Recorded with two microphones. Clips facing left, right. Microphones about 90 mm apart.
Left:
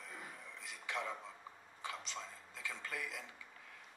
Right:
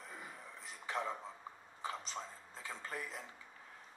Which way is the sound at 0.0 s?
35° right (ahead or behind).